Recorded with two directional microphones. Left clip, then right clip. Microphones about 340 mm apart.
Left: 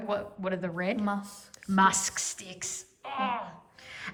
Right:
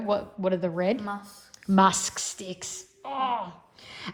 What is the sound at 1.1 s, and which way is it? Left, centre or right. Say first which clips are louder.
Speech: left 1 dB; centre.